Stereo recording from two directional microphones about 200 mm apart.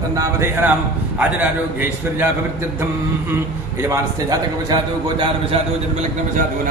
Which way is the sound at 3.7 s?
15° right (ahead or behind).